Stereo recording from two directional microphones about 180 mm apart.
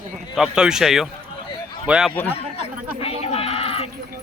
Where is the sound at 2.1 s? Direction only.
10° left (ahead or behind).